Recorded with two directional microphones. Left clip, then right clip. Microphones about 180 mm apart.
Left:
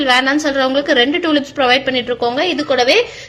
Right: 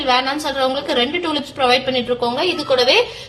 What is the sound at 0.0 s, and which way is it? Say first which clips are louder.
A woman's voice: left 4 dB; 25° left (ahead or behind).